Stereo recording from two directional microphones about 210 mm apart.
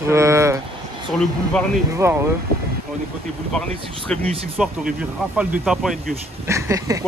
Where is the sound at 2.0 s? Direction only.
15° right (ahead or behind).